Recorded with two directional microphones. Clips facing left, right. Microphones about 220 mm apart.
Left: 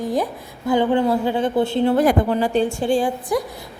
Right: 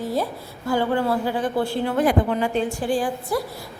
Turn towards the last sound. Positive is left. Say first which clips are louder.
# left 3 dB
turn(degrees=20)  # may be behind; listen again after turning